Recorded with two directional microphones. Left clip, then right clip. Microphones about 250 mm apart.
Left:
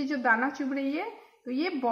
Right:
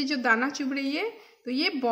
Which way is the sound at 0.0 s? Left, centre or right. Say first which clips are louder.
Right 1 dB; right.